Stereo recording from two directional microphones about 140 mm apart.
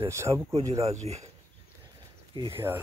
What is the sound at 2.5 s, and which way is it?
Speech, 15° right (ahead or behind).